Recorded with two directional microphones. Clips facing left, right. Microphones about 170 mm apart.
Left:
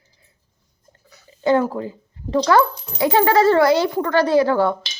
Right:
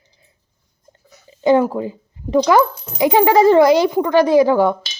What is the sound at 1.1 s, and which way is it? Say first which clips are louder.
Speech: right 4 dB; 20° right (ahead or behind).